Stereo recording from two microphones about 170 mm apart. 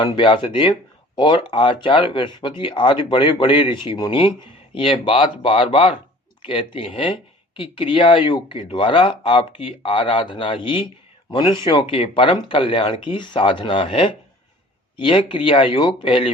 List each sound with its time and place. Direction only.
0.0 s speech: 30° left (ahead or behind)